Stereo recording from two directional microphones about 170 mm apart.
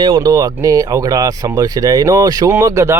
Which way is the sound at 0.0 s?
25° right (ahead or behind).